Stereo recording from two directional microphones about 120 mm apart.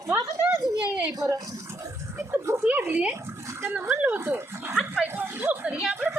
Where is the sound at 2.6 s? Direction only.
15° right (ahead or behind).